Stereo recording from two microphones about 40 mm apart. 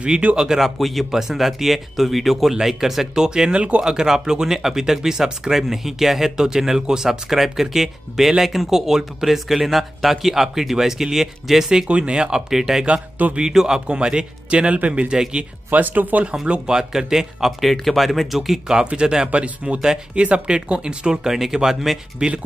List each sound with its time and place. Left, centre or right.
0.0 s speech: right
0.4 s speech: centre
3.3 s speech: centre
3.8 s speech: centre
11.9 s speech: right
14.7 s speech: right
15.0 s speech: right
15.7 s speech: right
16.4 s speech: right
16.7 s speech: centre
18.9 s speech: right
19.3 s speech: right; by 22.3 s centre